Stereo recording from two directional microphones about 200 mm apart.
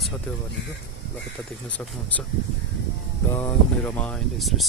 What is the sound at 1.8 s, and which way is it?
Speech, 5° left (ahead or behind).